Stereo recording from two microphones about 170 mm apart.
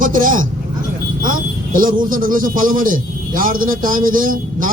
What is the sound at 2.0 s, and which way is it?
A man's voice, 55° right (ahead or behind).